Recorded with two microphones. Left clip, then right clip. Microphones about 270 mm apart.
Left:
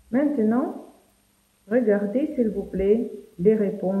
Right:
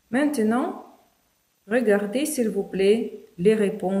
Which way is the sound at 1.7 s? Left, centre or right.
Right.